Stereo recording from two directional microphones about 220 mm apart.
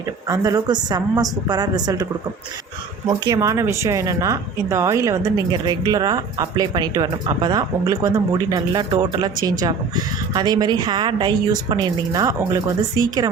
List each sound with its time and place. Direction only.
0.3 s a woman's voice: 15° right (ahead or behind)
3.1 s speech: 15° right (ahead or behind)